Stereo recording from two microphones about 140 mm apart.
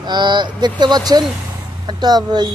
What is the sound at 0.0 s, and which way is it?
Speech, 35° right (ahead or behind).